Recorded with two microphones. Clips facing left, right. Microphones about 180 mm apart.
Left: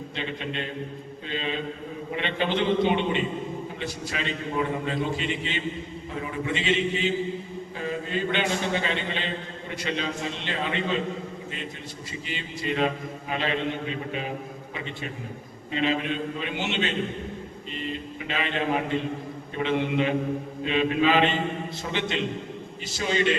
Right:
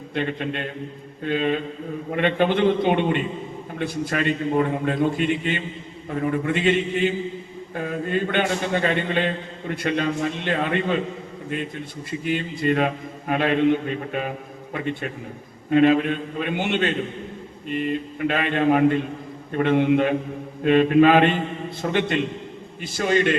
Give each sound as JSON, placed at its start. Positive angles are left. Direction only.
{"t": 0.1, "sound": "a man's voice", "side_deg": -55}
{"t": 12.2, "sound": "a man's voice", "side_deg": -55}